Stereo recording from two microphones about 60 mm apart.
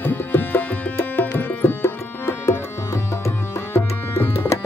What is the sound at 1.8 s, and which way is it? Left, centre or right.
Music, left.